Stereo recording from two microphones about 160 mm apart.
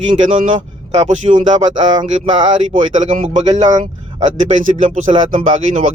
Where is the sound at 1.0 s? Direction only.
50° right (ahead or behind).